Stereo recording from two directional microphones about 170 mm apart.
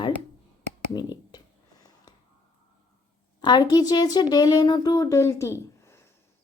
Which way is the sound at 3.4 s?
25° left (ahead or behind).